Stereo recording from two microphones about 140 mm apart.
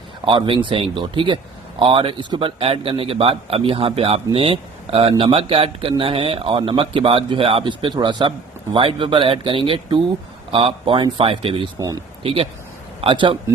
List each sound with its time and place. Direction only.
0.3 s a man's voice: 35° right (ahead or behind)